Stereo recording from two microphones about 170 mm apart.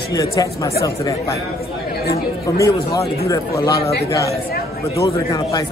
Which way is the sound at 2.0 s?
60° left (ahead or behind).